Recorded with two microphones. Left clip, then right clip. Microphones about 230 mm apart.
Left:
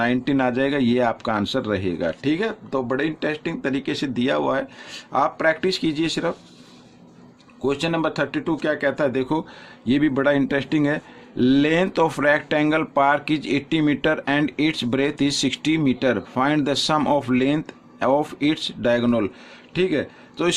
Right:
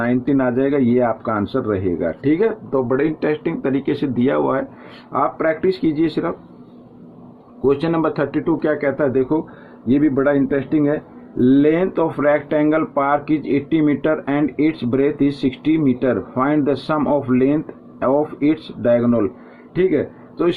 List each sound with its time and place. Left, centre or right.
0.0 s speech: left
7.6 s a man's voice: left